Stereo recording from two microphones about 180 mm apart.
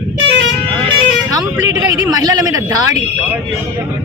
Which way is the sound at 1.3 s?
20° right (ahead or behind).